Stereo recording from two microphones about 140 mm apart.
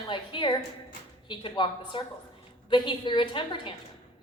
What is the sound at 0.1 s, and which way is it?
A woman's voice, 35° left (ahead or behind).